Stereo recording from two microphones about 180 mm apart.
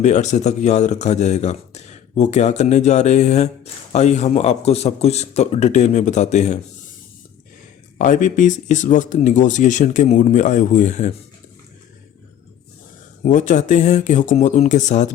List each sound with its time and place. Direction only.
0.0 s speech: 40° left (ahead or behind)
7.9 s speech: 45° left (ahead or behind)
13.2 s speech: 45° left (ahead or behind)